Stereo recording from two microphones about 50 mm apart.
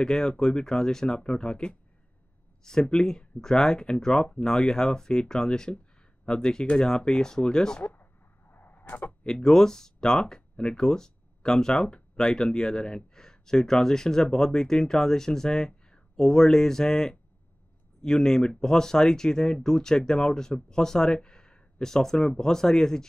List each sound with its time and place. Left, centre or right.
0.0 s speech: centre
7.8 s a sound: left
9.2 s speech: centre